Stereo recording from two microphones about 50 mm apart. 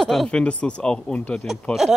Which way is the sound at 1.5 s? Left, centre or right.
Centre.